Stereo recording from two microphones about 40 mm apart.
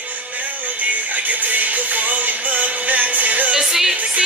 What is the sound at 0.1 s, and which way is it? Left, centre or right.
Music, right.